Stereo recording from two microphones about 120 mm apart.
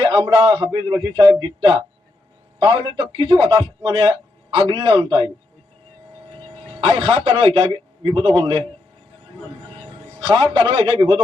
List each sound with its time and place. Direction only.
0.0 s a man's voice: 40° right (ahead or behind)
6.6 s a man's voice: 55° right (ahead or behind)
9.8 s a sound: 45° right (ahead or behind)
10.5 s a man's voice: 45° right (ahead or behind)